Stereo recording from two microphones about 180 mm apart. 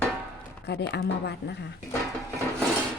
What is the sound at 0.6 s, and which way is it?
Speech, 75° left (ahead or behind).